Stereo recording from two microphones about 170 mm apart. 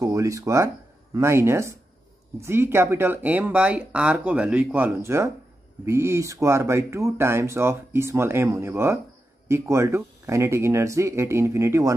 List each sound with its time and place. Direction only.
0.0 s speech: 20° right (ahead or behind)